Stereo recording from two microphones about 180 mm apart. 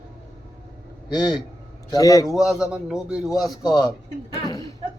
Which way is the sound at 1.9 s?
20° left (ahead or behind).